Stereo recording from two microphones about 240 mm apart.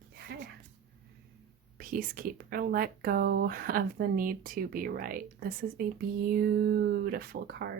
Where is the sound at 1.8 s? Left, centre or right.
Right.